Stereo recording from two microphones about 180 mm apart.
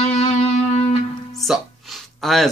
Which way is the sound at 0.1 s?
35° left (ahead or behind).